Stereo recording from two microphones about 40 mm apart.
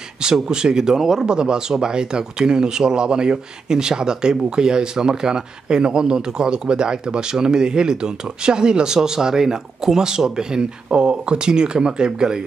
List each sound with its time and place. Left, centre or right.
0.2 s speech: centre